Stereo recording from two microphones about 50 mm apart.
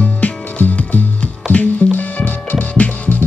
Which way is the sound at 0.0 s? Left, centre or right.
Left.